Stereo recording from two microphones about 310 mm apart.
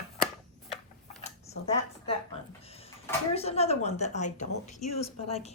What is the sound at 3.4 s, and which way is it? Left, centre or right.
Speech, centre.